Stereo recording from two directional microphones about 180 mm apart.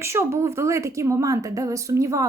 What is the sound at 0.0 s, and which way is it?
Speech, 15° right (ahead or behind).